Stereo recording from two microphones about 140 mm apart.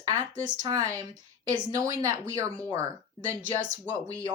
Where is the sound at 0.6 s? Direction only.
25° right (ahead or behind).